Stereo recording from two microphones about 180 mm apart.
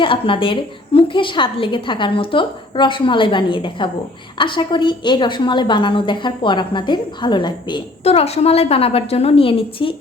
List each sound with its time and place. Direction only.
0.0 s a woman's voice: 30° left (ahead or behind)